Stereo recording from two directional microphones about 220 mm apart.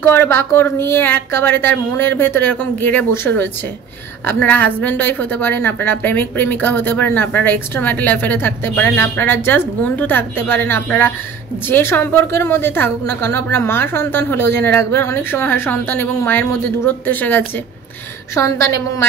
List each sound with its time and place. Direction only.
0.0 s a woman's voice: 10° left (ahead or behind)